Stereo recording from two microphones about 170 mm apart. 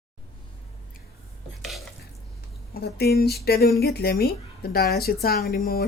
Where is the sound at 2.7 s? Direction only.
70° left (ahead or behind).